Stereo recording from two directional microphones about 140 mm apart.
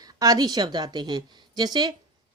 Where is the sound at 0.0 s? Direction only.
25° right (ahead or behind).